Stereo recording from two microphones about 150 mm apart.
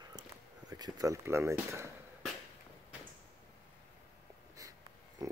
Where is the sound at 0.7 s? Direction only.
25° right (ahead or behind).